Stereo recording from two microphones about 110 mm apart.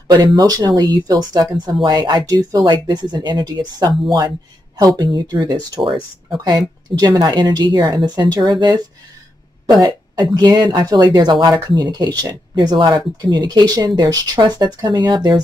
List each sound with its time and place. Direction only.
0.1 s speech: 35° right (ahead or behind)
7.0 s speech: 40° right (ahead or behind)
9.7 s a sound: 35° right (ahead or behind)
10.2 s speech: 40° right (ahead or behind)